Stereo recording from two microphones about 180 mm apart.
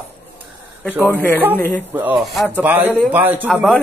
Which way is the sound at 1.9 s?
10° right (ahead or behind).